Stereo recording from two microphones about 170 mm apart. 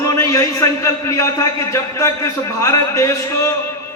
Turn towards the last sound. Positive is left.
turn(degrees=15)  # may be behind; listen again after turning